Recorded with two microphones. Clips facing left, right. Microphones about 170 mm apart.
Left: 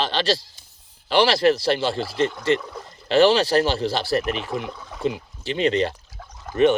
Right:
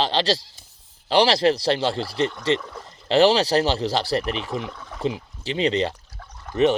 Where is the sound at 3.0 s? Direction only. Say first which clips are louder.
Left 1 dB; 35° right (ahead or behind).